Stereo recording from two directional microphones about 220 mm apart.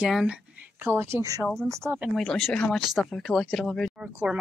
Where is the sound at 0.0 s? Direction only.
5° right (ahead or behind).